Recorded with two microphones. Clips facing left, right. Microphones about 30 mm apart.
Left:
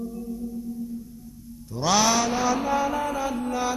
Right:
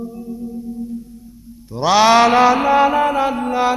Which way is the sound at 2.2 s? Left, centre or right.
Right.